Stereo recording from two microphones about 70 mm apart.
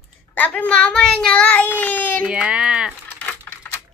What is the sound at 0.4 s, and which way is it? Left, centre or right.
A child's voice, left.